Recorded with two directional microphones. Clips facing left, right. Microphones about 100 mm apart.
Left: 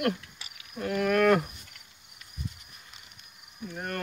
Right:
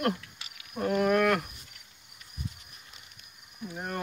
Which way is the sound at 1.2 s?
5° left (ahead or behind).